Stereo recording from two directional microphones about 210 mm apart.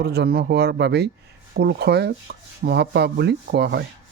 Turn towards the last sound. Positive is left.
turn(degrees=-50)  # may be behind; listen again after turning